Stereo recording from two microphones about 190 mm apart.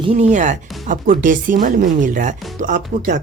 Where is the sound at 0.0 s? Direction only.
30° right (ahead or behind).